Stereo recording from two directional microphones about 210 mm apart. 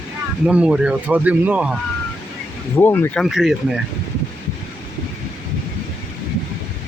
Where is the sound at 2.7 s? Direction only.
10° left (ahead or behind).